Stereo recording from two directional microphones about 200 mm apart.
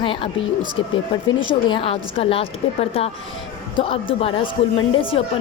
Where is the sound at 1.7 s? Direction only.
30° left (ahead or behind).